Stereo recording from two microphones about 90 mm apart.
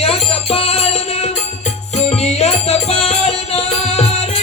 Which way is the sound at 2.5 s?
90° left.